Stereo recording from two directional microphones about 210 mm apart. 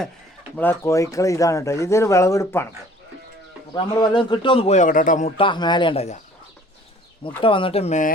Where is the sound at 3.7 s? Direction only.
25° left (ahead or behind).